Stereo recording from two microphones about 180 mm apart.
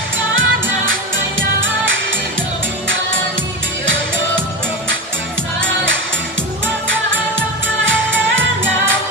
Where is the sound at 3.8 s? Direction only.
90° right.